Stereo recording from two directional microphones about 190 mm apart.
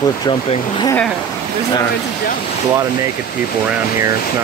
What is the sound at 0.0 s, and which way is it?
Speech, 20° left (ahead or behind).